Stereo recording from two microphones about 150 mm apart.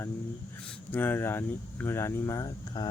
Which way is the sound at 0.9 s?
15° left (ahead or behind).